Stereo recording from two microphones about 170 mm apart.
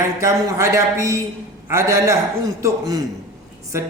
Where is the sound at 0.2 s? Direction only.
20° right (ahead or behind).